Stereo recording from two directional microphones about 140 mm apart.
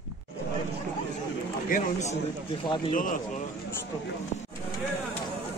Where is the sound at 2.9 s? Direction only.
75° left (ahead or behind).